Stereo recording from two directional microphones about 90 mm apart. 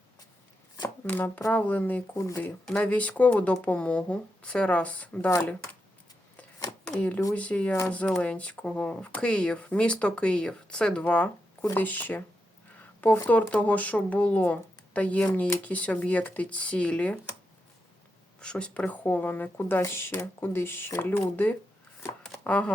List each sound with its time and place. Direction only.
1.0 s speech: 20° left (ahead or behind)
2.1 s speech: 35° left (ahead or behind)
2.4 s speech: 15° left (ahead or behind)
6.8 s speech: 15° left (ahead or behind)
13.2 s speech: 20° left (ahead or behind)
18.3 s speech: 10° left (ahead or behind)
22.2 s shuffling cards: 10° left (ahead or behind)